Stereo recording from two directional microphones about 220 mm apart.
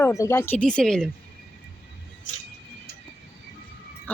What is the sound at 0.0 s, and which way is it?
A man's voice, 15° left (ahead or behind).